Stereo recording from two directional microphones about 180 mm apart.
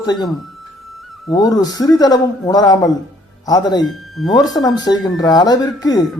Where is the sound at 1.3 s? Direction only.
20° left (ahead or behind).